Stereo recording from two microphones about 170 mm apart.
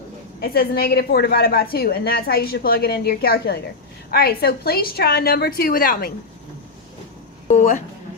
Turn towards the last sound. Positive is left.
turn(degrees=45)  # may be behind; listen again after turning